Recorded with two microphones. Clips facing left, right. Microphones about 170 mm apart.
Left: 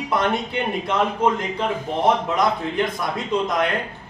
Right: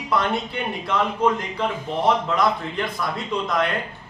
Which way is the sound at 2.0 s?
20° left (ahead or behind).